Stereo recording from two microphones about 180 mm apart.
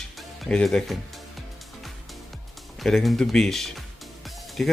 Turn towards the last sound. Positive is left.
turn(degrees=0)  # may be behind; listen again after turning